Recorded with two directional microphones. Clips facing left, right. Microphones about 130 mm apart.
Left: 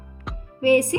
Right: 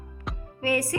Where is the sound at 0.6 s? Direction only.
20° left (ahead or behind).